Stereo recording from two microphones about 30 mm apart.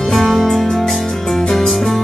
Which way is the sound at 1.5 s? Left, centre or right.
Centre.